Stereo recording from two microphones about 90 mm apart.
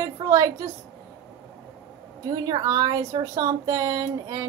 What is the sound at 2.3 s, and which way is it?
A woman's voice, 45° right (ahead or behind).